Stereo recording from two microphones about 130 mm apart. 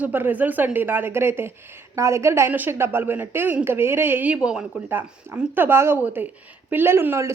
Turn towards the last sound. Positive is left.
turn(degrees=-20)  # may be behind; listen again after turning